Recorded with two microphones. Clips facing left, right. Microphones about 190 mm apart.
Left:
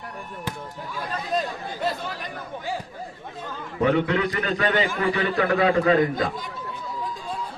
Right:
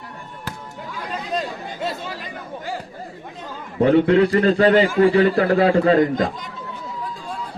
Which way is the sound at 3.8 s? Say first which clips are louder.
Right 7 dB; 35° right (ahead or behind).